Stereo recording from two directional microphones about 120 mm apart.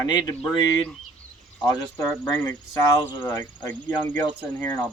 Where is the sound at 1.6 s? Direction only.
30° left (ahead or behind).